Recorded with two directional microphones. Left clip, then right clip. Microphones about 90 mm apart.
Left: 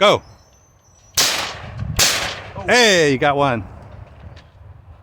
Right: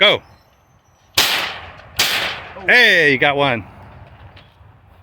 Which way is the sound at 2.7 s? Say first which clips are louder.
Right 2 dB; 40° left (ahead or behind).